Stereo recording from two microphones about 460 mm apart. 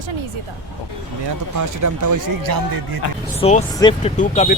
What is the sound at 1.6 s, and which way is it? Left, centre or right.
Speech, right.